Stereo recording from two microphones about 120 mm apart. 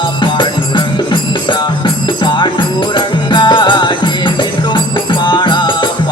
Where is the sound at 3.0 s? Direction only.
40° left (ahead or behind).